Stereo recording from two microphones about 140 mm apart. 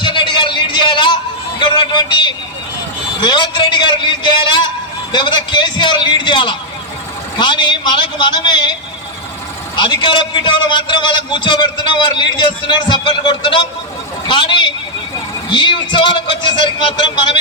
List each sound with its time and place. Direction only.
0.0 s a sound: 35° left (ahead or behind)
1.5 s a man's voice: 35° left (ahead or behind)
9.7 s a man's voice: 35° left (ahead or behind)